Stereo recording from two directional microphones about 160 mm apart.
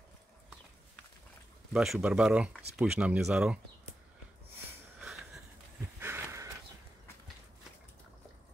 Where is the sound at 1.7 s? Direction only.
Centre (ahead or behind).